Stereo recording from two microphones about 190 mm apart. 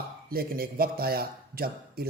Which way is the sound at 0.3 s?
50° right (ahead or behind).